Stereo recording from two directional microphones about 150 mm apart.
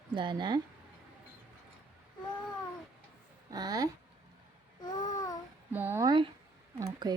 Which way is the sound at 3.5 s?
25° right (ahead or behind).